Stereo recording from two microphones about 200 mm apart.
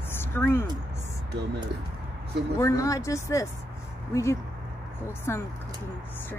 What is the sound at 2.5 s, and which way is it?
Speech, 15° left (ahead or behind).